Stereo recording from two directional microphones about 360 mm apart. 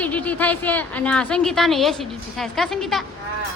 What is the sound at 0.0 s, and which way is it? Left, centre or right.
A woman's voice, centre.